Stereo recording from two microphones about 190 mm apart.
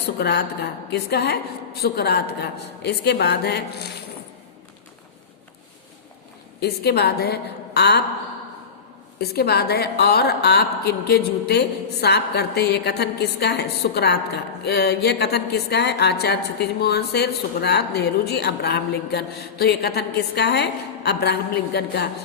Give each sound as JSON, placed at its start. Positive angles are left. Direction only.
{"t": 0.0, "sound": "a woman's voice", "side_deg": 60}
{"t": 6.6, "sound": "a woman's voice", "side_deg": 60}
{"t": 9.2, "sound": "a woman's voice", "side_deg": 55}